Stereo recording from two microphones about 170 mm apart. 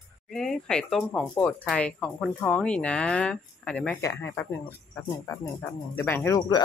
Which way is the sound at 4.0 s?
15° left (ahead or behind).